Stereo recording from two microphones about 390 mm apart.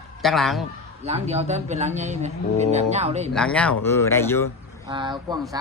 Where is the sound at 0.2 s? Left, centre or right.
Centre.